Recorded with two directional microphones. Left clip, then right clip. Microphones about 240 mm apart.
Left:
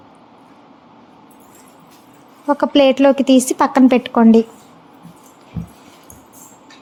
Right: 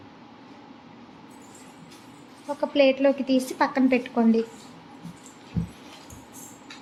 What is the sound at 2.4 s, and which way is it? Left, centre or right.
A woman's voice, left.